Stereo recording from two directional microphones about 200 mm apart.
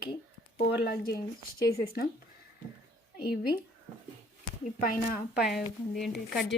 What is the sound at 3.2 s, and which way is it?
Speech, 50° left (ahead or behind).